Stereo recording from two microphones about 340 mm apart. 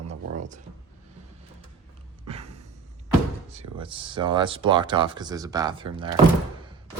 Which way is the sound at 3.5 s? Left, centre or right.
Centre.